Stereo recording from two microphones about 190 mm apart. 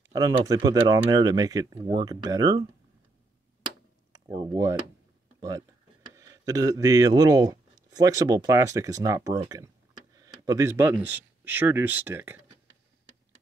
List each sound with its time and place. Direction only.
0.1 s speech: 20° right (ahead or behind)
4.3 s speech: 20° right (ahead or behind)
6.1 s speech: 15° right (ahead or behind)